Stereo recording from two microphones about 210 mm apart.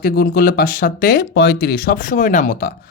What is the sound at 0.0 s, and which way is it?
Speech, 45° left (ahead or behind).